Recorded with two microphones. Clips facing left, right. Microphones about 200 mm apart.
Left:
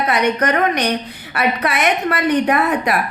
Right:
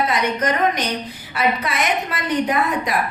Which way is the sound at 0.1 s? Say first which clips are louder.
Left 4 dB; 65° left (ahead or behind).